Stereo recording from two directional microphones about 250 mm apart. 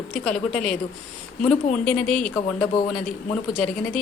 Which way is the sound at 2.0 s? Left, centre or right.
Left.